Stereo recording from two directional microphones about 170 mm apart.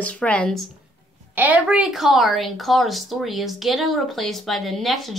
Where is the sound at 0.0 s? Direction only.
5° left (ahead or behind).